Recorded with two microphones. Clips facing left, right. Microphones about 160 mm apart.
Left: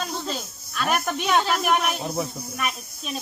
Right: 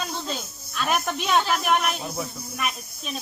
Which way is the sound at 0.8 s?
5° left (ahead or behind).